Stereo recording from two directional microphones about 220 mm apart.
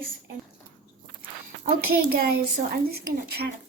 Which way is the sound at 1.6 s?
40° right (ahead or behind).